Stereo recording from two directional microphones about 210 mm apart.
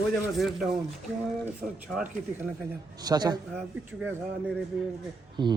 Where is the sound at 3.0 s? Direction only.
20° right (ahead or behind).